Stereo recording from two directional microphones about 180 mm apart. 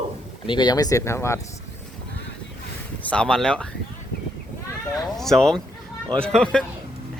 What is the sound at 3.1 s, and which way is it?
Speech, 5° left (ahead or behind).